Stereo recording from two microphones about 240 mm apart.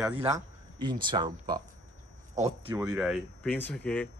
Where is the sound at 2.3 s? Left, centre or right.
Right.